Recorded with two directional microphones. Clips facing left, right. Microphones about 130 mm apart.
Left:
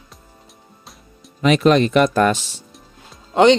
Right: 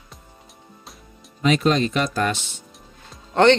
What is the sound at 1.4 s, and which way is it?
Speech, 70° left (ahead or behind).